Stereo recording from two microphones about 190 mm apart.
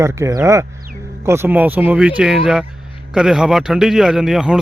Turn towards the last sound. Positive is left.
turn(degrees=-5)  # may be behind; listen again after turning